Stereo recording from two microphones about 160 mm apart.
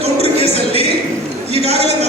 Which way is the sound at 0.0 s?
40° right (ahead or behind).